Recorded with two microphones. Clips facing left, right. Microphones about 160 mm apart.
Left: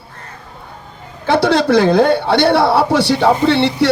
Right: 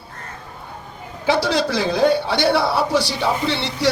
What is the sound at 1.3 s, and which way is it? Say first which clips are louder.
A man's voice: left 7 dB; 60° left (ahead or behind).